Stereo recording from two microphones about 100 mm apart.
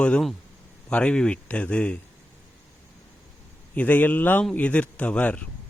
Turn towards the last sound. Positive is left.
turn(degrees=15)  # may be behind; listen again after turning